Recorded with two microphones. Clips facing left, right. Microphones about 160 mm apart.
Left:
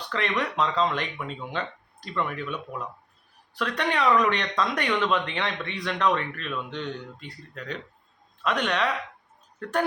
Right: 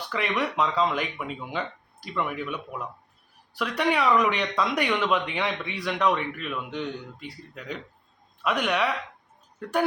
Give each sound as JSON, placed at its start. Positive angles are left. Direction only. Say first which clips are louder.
{"t": 0.1, "sound": "speech", "louder": "even", "side_deg": -5}